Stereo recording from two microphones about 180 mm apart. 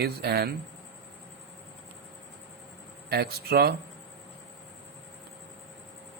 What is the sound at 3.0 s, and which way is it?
Speech, 60° right (ahead or behind).